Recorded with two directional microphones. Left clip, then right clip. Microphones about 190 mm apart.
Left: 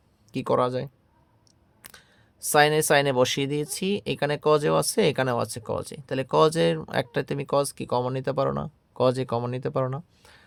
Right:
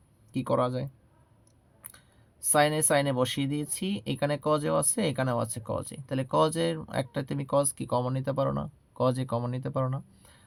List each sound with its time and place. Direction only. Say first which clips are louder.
0.3 s speech: left 4 dB; 40° left (ahead or behind)